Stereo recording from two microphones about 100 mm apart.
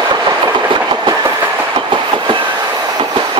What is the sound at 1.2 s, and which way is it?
Train, 25° right (ahead or behind).